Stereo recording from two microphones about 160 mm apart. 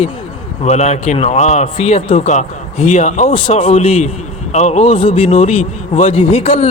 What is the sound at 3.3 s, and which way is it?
Speech, 35° left (ahead or behind).